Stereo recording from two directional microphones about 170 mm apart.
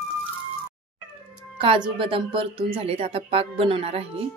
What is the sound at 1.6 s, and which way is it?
Speech, 30° right (ahead or behind).